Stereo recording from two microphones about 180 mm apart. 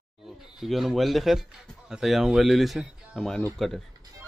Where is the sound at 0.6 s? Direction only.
Centre (ahead or behind).